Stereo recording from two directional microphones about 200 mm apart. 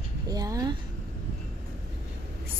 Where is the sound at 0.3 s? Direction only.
20° right (ahead or behind).